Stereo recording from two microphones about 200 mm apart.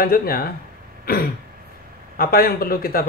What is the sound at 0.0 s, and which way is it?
Speech, 50° left (ahead or behind).